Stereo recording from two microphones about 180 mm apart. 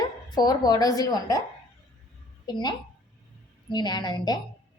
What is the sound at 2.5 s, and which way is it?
A woman's voice, 25° left (ahead or behind).